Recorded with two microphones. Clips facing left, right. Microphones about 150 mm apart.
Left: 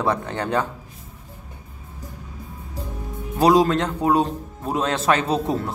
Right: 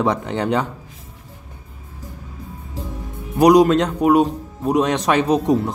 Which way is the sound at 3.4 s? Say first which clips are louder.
Right 5 dB; 15° right (ahead or behind).